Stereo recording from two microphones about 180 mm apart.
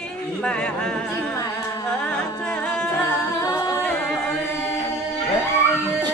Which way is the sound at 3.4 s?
15° left (ahead or behind).